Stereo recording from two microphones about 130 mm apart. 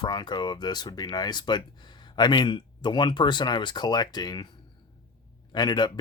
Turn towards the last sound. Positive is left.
turn(degrees=35)  # may be behind; listen again after turning